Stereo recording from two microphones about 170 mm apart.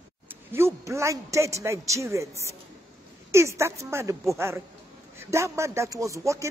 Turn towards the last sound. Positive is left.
turn(degrees=-20)  # may be behind; listen again after turning